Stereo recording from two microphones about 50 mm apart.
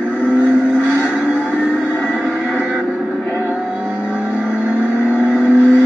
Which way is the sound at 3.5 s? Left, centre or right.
Right.